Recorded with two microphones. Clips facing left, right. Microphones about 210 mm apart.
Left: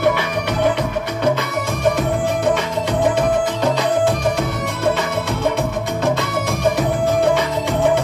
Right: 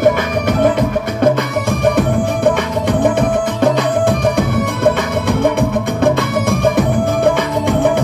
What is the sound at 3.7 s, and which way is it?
Music, 55° right (ahead or behind).